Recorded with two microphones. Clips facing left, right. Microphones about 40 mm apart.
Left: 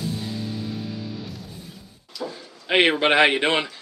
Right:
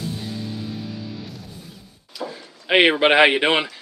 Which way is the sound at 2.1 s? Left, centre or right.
Centre.